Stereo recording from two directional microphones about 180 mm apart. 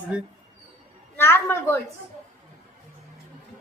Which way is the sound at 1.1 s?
15° left (ahead or behind).